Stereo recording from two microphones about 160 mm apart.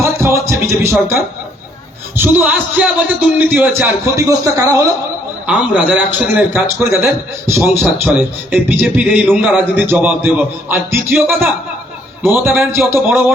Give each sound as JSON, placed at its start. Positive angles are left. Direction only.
{"t": 0.0, "sound": "music", "side_deg": -20}
{"t": 2.1, "sound": "a man's voice", "side_deg": -15}
{"t": 5.5, "sound": "a man's voice", "side_deg": -5}